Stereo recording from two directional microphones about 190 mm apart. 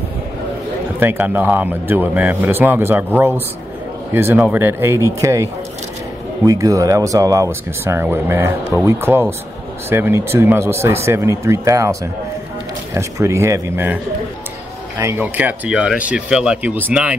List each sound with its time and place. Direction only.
0.9 s speech: 10° right (ahead or behind)
15.0 s speech: 15° right (ahead or behind)